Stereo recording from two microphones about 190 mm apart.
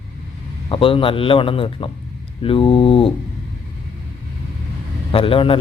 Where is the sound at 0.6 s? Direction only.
30° left (ahead or behind).